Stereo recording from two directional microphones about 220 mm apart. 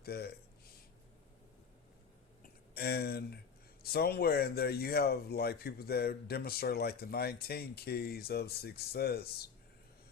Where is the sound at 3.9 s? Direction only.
45° left (ahead or behind).